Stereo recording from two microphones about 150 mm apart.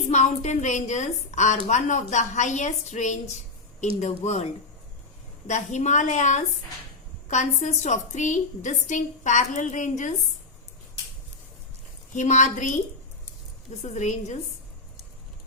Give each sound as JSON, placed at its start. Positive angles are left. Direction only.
{"t": 0.1, "sound": "a woman's voice", "side_deg": 50}
{"t": 5.5, "sound": "a woman's voice", "side_deg": 50}
{"t": 12.1, "sound": "a woman's voice", "side_deg": 50}
{"t": 13.8, "sound": "a woman's voice", "side_deg": 50}